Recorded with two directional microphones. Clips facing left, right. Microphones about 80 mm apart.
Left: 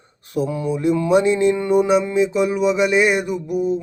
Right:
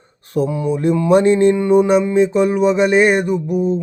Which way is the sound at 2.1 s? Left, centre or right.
Right.